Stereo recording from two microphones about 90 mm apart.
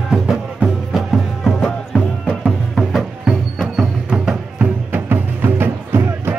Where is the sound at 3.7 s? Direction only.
10° right (ahead or behind).